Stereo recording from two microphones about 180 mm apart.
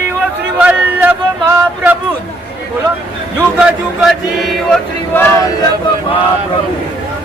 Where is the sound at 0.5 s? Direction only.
10° right (ahead or behind).